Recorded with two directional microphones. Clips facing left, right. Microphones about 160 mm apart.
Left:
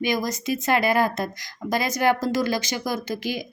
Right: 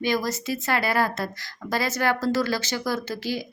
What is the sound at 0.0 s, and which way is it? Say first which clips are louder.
Speech: even; 15° left (ahead or behind).